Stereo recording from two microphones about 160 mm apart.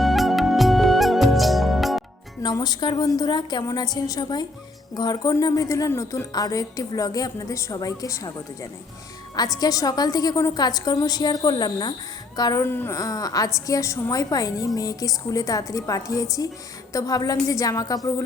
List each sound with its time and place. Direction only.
0.0 s music: centre (ahead or behind)
2.4 s speech: 25° left (ahead or behind)
9.6 s speech: 25° left (ahead or behind)
12.6 s speech: 15° left (ahead or behind)